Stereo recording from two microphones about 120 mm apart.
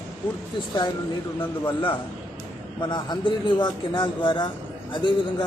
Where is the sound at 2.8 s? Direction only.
35° left (ahead or behind).